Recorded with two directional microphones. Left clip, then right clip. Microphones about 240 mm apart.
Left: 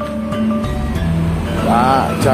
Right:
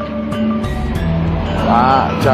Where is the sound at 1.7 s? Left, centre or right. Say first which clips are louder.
Right 1 dB; left.